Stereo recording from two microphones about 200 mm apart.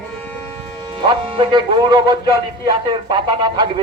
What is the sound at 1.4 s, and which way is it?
Speech, 20° right (ahead or behind).